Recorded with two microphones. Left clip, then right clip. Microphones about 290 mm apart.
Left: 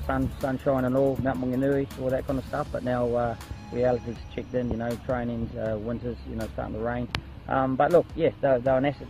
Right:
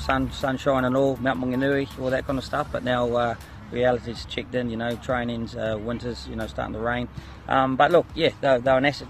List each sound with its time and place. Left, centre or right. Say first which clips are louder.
0.0 s speech: right 4 dB; right